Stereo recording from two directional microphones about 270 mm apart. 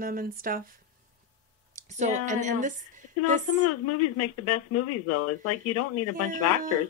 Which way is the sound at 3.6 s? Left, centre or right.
Left.